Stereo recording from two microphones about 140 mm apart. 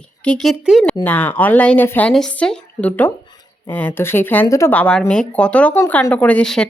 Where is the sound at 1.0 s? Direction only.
10° left (ahead or behind).